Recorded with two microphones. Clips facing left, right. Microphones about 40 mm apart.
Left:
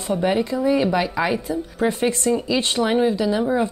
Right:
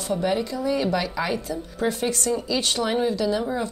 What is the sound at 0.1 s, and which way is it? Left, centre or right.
Speech, left.